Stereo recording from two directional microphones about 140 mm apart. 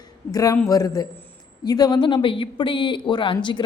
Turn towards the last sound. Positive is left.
turn(degrees=35)  # may be behind; listen again after turning